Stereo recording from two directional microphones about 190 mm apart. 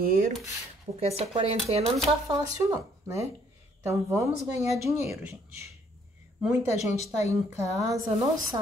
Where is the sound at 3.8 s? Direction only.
15° right (ahead or behind).